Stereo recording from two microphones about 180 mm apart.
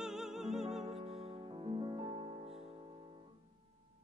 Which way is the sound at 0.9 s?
30° right (ahead or behind).